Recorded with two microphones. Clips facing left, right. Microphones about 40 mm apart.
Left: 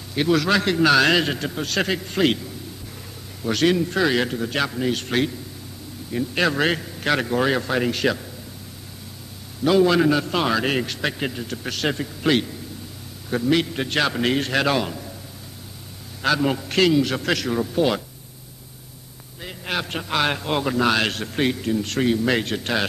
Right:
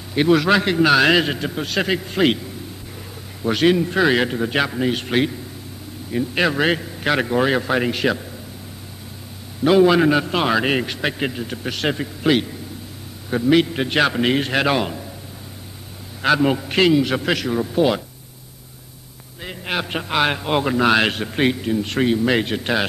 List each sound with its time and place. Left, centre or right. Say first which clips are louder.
0.1 s a man's voice: right 4 dB; centre
3.4 s a man's voice: right 3 dB; centre
9.6 s a man's voice: right 3 dB; centre
16.2 s a man's voice: right 4 dB; centre
19.4 s a man's voice: right 2 dB; centre